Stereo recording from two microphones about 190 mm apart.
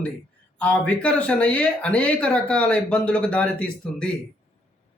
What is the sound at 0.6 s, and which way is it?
Speech, 5° left (ahead or behind).